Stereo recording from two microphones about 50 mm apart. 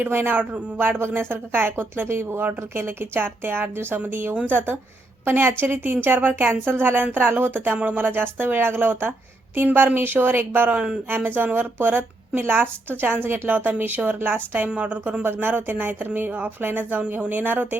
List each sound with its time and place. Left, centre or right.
0.0 s speech: right
15.2 s speech: right